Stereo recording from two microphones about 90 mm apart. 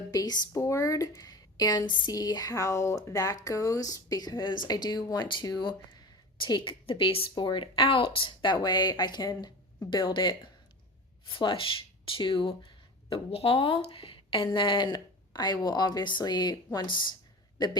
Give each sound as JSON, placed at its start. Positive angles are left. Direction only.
{"t": 0.1, "sound": "speech", "side_deg": 45}
{"t": 5.5, "sound": "speech", "side_deg": 55}
{"t": 6.4, "sound": "speech", "side_deg": 65}
{"t": 7.3, "sound": "speech", "side_deg": 60}
{"t": 13.1, "sound": "speech", "side_deg": 85}